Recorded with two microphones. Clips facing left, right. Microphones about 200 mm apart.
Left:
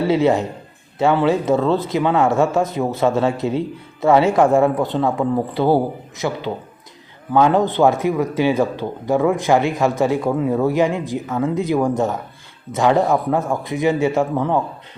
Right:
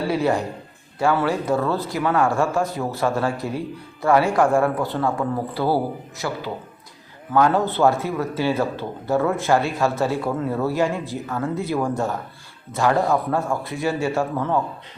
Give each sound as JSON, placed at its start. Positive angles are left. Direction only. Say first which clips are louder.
{"t": 0.0, "sound": "a man's voice", "louder": "left 5 dB", "side_deg": 20}